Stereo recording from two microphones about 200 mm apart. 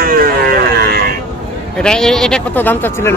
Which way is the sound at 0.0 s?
50° right (ahead or behind).